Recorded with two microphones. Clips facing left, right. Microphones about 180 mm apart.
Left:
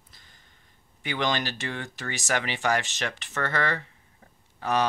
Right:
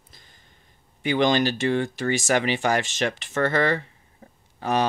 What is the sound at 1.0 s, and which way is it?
Speech, 15° right (ahead or behind).